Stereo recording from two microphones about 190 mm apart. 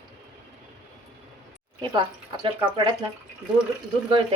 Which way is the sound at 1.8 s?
25° right (ahead or behind).